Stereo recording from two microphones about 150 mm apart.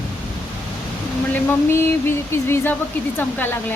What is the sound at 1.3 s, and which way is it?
Speech, 15° left (ahead or behind).